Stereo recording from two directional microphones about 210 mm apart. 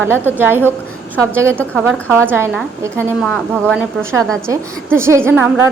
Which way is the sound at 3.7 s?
10° right (ahead or behind).